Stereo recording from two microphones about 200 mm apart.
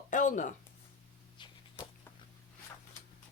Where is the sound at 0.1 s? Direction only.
40° left (ahead or behind).